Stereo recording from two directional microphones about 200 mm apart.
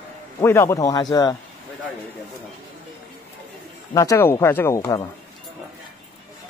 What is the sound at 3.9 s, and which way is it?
Speech, 15° left (ahead or behind).